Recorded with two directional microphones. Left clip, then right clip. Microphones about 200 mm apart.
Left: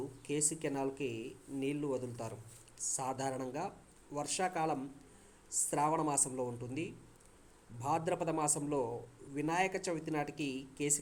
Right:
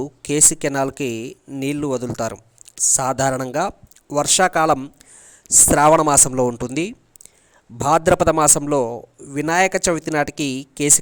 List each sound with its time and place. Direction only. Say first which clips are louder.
0.0 s speech: right 19 dB; 55° right (ahead or behind)